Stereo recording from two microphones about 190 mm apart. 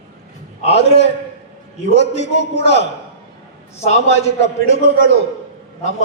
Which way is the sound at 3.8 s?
35° left (ahead or behind).